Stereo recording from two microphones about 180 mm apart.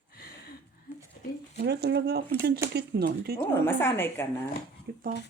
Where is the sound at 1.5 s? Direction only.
65° right (ahead or behind).